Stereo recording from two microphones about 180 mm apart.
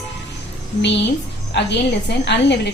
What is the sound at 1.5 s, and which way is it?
A woman's voice, 75° left (ahead or behind).